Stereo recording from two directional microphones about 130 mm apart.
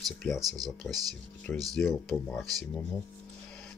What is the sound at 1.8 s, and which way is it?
Speech, centre (ahead or behind).